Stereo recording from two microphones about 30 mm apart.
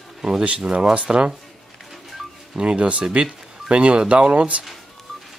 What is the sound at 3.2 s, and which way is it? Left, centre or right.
Speech, right.